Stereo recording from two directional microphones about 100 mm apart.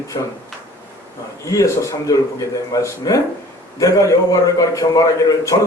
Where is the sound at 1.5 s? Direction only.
30° left (ahead or behind).